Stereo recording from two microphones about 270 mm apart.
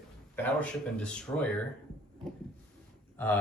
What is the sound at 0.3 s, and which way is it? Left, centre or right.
Speech, centre.